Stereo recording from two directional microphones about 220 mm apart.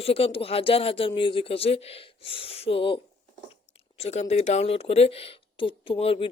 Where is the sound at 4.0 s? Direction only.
30° left (ahead or behind).